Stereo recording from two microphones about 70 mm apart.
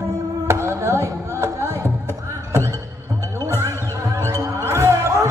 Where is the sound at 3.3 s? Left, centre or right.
Right.